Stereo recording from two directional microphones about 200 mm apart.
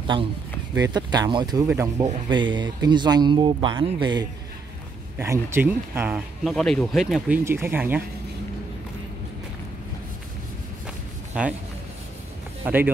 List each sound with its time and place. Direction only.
0.0 s speech: 25° right (ahead or behind); by 7.3 s centre (ahead or behind)
7.4 s speech: 10° right (ahead or behind)
11.3 s speech: 5° right (ahead or behind)
12.6 s speech: 10° right (ahead or behind)